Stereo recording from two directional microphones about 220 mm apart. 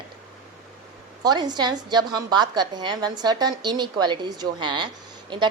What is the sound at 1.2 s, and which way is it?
A woman's voice, 20° right (ahead or behind).